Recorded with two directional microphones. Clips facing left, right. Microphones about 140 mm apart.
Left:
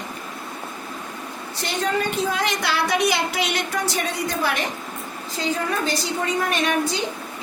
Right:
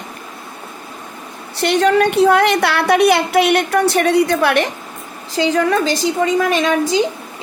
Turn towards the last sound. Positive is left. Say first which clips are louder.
# right 6 dB
turn(degrees=-90)